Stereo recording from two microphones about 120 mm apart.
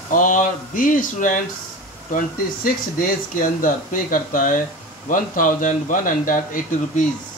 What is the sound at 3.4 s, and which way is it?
A man's voice, 90° left.